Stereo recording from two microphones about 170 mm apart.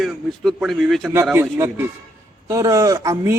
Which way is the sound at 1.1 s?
15° right (ahead or behind).